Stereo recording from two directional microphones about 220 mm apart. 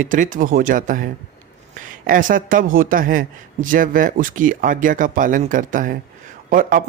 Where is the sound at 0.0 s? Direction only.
35° right (ahead or behind).